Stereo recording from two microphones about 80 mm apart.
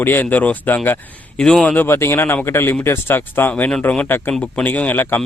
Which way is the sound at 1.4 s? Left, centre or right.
Centre.